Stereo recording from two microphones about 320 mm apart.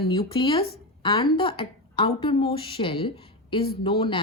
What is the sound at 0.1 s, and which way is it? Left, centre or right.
A woman's voice, centre.